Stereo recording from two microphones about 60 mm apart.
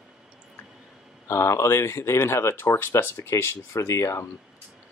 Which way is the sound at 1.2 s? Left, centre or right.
Left.